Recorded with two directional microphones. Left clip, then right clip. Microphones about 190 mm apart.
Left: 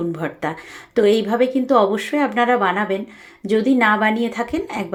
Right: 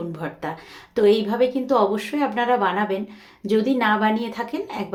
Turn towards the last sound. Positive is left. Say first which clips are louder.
# left 4 dB
turn(degrees=25)  # may be behind; listen again after turning